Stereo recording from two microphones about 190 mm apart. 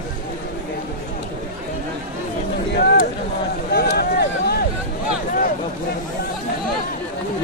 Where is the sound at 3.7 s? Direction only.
55° left (ahead or behind).